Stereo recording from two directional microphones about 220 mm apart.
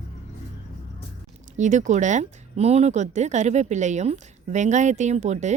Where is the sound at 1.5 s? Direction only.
35° right (ahead or behind).